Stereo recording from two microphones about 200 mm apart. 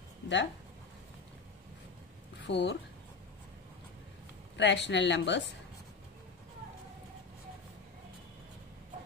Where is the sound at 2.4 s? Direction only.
60° left (ahead or behind).